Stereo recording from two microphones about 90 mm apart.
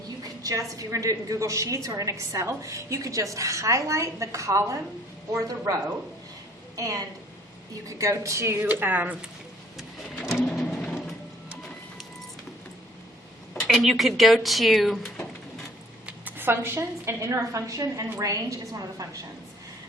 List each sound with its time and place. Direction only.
0.4 s a woman's voice: 40° right (ahead or behind)
6.7 s a woman's voice: 40° right (ahead or behind)
8.8 s speech: 20° right (ahead or behind)
10.5 s a sound: 5° left (ahead or behind)
13.5 s speech: 5° left (ahead or behind)
16.0 s a woman's voice: 20° right (ahead or behind); by 19.0 s 40° right (ahead or behind)